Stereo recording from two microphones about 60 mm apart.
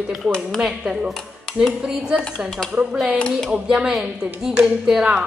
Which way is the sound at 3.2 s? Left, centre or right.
Centre.